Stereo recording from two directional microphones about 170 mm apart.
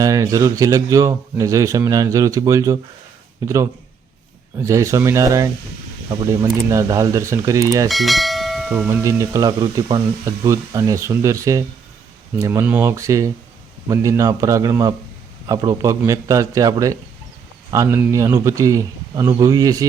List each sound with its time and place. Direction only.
0.0 s speech: 20° right (ahead or behind)
7.9 s bell: centre (ahead or behind)
8.9 s speech: 15° right (ahead or behind)